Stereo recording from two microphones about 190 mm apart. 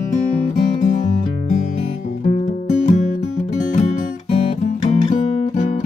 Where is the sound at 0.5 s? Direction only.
40° left (ahead or behind).